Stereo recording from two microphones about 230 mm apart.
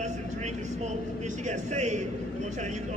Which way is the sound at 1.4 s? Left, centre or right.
Right.